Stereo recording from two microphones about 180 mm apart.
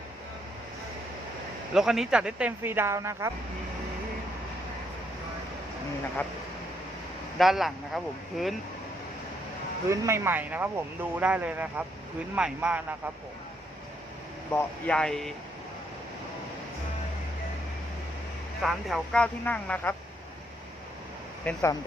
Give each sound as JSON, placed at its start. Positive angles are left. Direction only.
{"t": 1.7, "sound": "speech", "side_deg": 0}
{"t": 7.3, "sound": "speech", "side_deg": 0}
{"t": 9.9, "sound": "speech", "side_deg": -15}
{"t": 14.5, "sound": "speech", "side_deg": 10}
{"t": 18.6, "sound": "speech", "side_deg": 0}
{"t": 21.4, "sound": "speech", "side_deg": 15}